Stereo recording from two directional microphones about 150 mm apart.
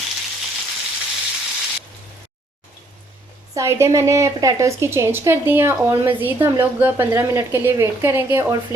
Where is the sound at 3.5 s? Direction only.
20° right (ahead or behind).